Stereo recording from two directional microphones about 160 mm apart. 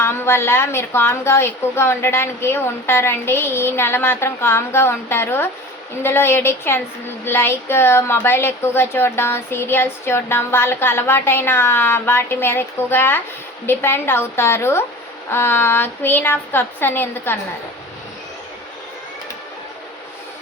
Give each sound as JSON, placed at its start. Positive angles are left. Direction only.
{"t": 0.0, "sound": "a woman's voice", "side_deg": 15}